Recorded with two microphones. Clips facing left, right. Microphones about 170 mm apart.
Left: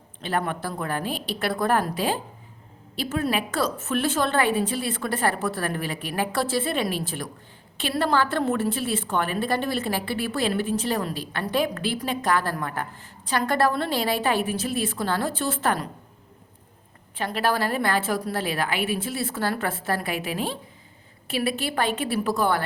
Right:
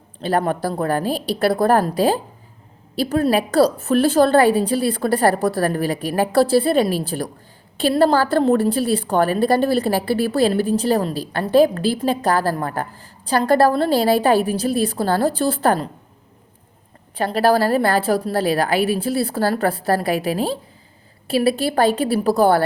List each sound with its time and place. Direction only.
0.2 s a woman's voice: 35° right (ahead or behind)
17.2 s a woman's voice: 35° right (ahead or behind)